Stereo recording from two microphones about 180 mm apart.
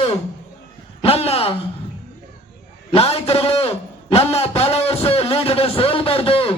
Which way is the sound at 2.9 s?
35° left (ahead or behind).